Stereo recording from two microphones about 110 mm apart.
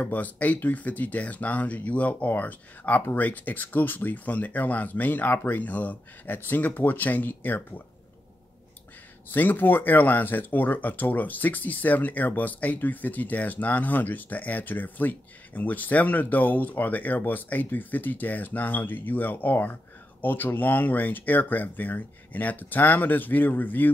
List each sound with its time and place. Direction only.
0.0 s speech: 15° left (ahead or behind)
9.3 s speech: 15° left (ahead or behind)